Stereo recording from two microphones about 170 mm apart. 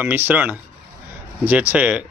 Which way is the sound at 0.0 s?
10° right (ahead or behind).